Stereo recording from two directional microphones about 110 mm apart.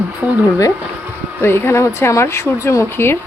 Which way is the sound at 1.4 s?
25° left (ahead or behind).